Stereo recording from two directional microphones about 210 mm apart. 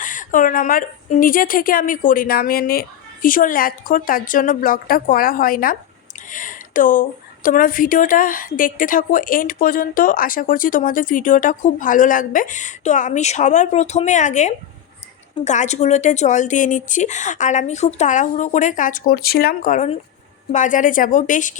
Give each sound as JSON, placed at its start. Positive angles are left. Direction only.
{"t": 0.0, "sound": "a woman's voice", "side_deg": 40}